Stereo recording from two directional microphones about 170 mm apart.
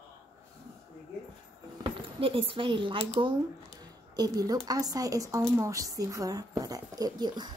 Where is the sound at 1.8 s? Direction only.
30° right (ahead or behind).